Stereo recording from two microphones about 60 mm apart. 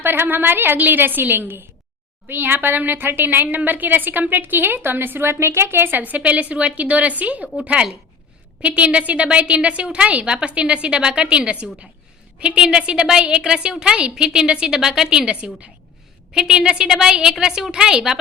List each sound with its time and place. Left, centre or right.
0.0 s a woman's voice: right; by 18.2 s centre